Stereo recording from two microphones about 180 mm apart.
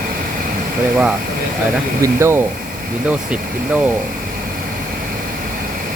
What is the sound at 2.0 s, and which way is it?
Speech, 15° right (ahead or behind).